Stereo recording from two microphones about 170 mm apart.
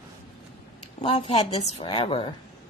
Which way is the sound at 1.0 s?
30° left (ahead or behind).